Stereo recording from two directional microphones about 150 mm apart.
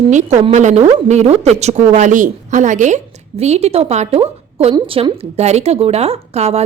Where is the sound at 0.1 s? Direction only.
50° right (ahead or behind).